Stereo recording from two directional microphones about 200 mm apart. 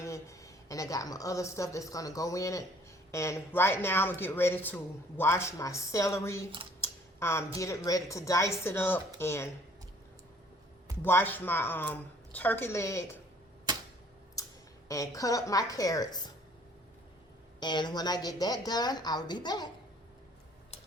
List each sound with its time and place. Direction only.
0.0 s a woman's voice: 15° left (ahead or behind)
11.0 s speech: 10° left (ahead or behind)
14.4 s a sound: 15° left (ahead or behind)
14.8 s speech: 15° left (ahead or behind)
17.6 s a woman's voice: 20° left (ahead or behind)